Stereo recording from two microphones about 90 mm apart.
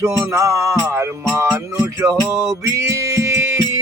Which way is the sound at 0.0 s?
35° right (ahead or behind).